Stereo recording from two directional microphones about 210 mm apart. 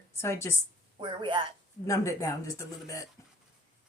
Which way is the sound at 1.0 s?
25° right (ahead or behind).